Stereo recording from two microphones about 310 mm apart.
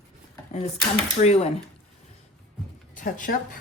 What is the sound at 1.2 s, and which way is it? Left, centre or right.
Speech, left.